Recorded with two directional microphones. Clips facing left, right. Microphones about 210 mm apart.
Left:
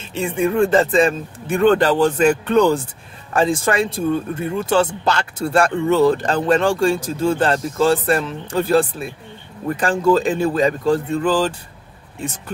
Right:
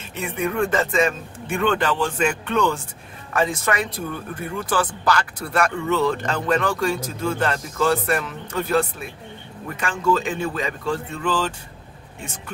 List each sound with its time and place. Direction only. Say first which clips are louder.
0.1 s speech: left 6 dB; 30° left (ahead or behind)